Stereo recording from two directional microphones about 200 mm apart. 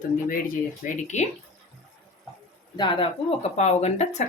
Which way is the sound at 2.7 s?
25° left (ahead or behind).